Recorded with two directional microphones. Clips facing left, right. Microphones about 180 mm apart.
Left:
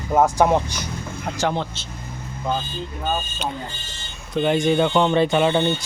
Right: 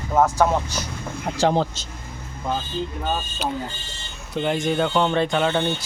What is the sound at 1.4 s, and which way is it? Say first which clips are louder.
Speech: right 4 dB; 35° right (ahead or behind).